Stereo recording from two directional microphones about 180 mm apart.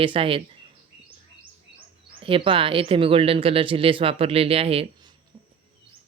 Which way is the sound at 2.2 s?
30° right (ahead or behind).